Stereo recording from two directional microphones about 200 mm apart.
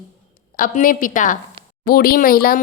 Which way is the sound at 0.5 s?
45° left (ahead or behind).